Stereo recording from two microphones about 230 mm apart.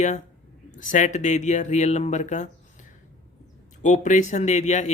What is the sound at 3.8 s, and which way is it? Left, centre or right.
Speech, left.